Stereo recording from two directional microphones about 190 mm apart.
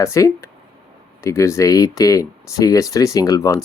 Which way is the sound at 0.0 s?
15° left (ahead or behind).